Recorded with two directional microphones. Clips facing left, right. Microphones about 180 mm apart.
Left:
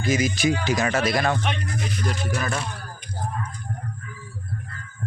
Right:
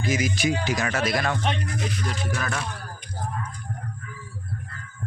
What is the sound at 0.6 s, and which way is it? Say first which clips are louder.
Speech: left 3 dB; 25° left (ahead or behind).